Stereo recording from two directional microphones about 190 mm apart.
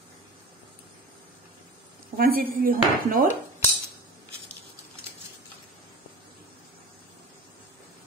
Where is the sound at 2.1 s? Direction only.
50° right (ahead or behind).